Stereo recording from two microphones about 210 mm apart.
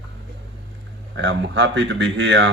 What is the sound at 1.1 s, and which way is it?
Speech, 55° right (ahead or behind).